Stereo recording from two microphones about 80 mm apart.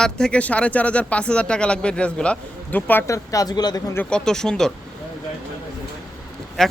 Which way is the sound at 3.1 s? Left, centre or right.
Left.